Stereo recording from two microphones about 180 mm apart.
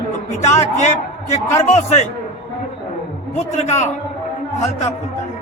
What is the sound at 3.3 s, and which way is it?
A man's voice, 40° left (ahead or behind).